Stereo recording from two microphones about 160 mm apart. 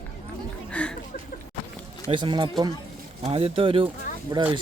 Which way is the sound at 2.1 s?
30° right (ahead or behind).